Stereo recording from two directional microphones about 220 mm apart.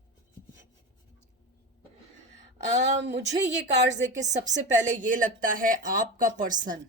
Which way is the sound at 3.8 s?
55° right (ahead or behind).